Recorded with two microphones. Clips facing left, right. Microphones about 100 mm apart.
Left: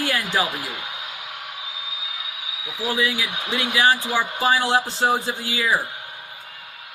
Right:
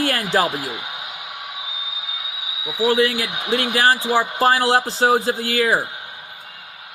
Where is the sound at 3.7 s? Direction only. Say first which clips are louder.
Right 2 dB; 35° right (ahead or behind).